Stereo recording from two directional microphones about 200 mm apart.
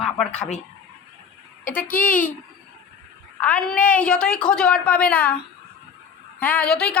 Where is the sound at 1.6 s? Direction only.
45° left (ahead or behind).